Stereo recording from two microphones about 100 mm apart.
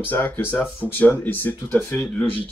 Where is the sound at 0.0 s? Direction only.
20° left (ahead or behind).